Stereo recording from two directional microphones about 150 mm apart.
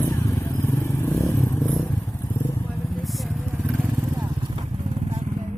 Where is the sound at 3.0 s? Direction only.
Centre (ahead or behind).